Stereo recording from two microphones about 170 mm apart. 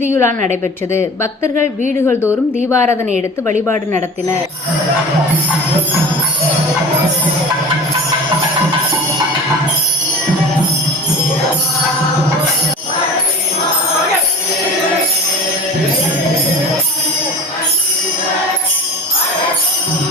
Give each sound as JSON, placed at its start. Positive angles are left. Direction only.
{"t": 0.1, "sound": "speech", "side_deg": 15}